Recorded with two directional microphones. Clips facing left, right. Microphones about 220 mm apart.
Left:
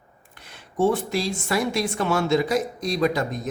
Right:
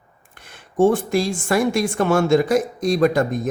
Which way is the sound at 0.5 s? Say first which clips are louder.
Right 5 dB; 50° right (ahead or behind).